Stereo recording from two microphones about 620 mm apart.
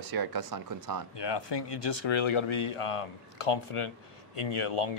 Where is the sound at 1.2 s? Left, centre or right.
Left.